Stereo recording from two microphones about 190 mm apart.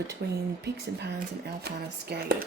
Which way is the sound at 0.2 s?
60° right (ahead or behind).